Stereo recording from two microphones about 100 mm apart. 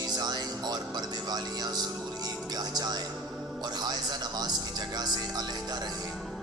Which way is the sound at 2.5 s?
40° right (ahead or behind).